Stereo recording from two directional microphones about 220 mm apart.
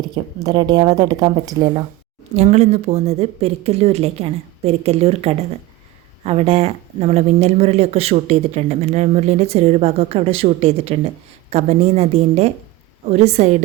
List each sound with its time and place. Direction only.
0.3 s speech: 20° right (ahead or behind)
2.3 s speech: 30° right (ahead or behind)